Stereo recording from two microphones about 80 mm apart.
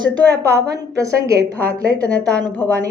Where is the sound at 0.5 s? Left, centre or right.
Right.